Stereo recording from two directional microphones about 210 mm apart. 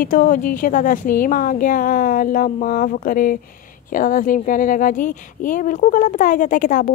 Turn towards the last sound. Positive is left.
turn(degrees=40)  # may be behind; listen again after turning